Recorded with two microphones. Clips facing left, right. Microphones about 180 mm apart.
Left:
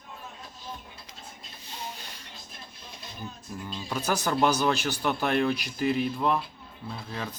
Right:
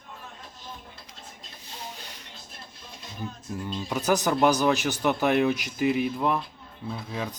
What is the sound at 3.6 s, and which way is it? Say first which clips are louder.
Speech: right 4 dB; 20° right (ahead or behind).